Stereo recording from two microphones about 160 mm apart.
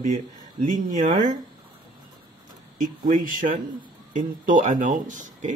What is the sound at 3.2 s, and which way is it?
Speech, 55° right (ahead or behind).